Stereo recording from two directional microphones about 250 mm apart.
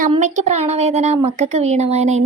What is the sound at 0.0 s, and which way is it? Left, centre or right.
A woman's voice, right.